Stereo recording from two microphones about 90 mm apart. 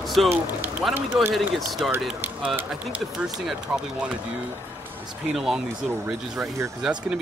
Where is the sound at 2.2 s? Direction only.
20° right (ahead or behind).